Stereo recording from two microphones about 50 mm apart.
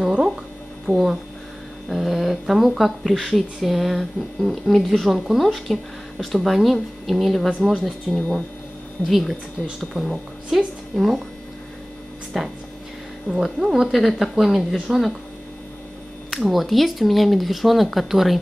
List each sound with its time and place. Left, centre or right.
0.9 s speech: left
1.9 s speech: centre
9.7 s speech: centre
12.3 s speech: centre
16.3 s speech: centre